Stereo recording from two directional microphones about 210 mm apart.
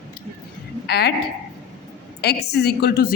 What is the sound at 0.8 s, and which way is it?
Speech, 50° left (ahead or behind).